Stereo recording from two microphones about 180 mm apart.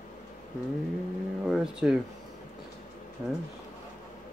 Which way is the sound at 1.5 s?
5° right (ahead or behind).